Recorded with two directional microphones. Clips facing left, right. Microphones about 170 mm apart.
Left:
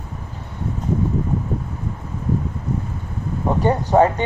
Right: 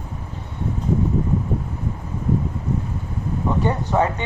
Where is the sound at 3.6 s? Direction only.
35° left (ahead or behind).